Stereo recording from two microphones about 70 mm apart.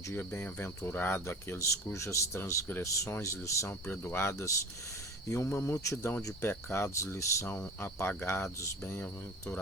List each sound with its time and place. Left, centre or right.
0.2 s speech: left
1.6 s speech: left
5.7 s speech: left
6.0 s speech: left
7.8 s speech: left